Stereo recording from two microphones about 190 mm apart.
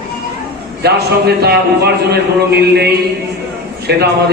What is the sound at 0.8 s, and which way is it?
Speech, 60° right (ahead or behind).